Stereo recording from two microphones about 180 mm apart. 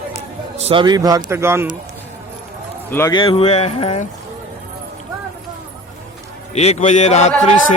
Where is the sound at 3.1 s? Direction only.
30° left (ahead or behind).